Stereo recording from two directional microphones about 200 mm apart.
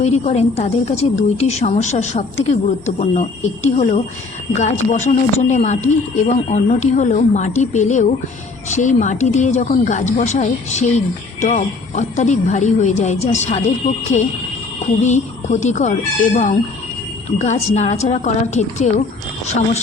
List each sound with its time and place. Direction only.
0.0 s speech: 35° left (ahead or behind)
15.0 s speech: 35° left (ahead or behind)